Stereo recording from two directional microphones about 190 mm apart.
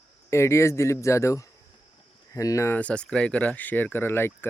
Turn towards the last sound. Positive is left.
turn(degrees=10)  # may be behind; listen again after turning